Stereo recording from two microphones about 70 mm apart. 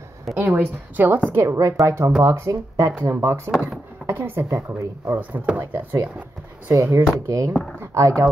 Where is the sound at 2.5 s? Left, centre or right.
Right.